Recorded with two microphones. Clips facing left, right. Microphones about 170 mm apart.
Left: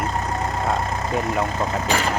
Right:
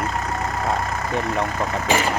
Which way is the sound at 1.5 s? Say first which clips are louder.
Even; 20° left (ahead or behind).